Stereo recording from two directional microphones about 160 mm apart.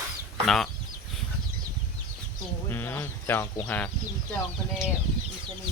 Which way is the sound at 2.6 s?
15° left (ahead or behind).